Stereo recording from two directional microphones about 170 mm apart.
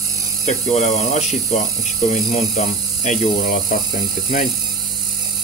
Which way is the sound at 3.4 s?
55° left (ahead or behind).